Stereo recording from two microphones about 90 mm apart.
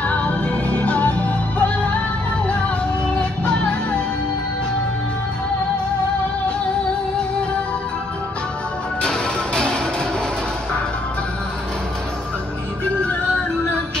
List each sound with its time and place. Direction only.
0.0 s music: 15° left (ahead or behind)
3.2 s music: 10° left (ahead or behind)
9.0 s music: 10° left (ahead or behind)